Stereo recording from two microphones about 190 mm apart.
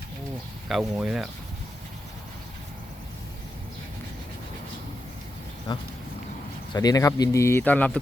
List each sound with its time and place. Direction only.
0.7 s speech: 5° right (ahead or behind)
5.7 s speech: 20° left (ahead or behind)